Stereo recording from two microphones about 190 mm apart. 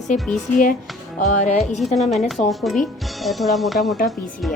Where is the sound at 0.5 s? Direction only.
45° left (ahead or behind).